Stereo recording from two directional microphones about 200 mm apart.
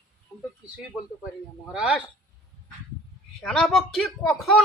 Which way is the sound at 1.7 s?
5° right (ahead or behind).